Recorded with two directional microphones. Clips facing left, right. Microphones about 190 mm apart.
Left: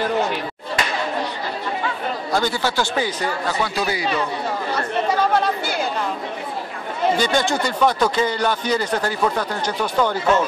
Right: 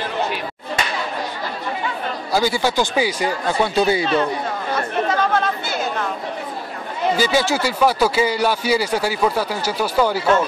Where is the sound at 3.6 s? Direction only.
25° right (ahead or behind).